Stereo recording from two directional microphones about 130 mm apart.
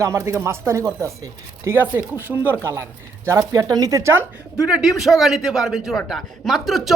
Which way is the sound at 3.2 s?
25° right (ahead or behind).